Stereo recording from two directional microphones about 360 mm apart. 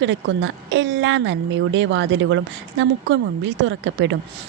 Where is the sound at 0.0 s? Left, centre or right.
Right.